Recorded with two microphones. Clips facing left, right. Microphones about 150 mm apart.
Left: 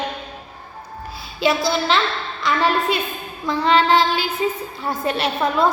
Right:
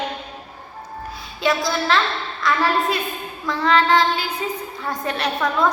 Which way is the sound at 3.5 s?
25° left (ahead or behind).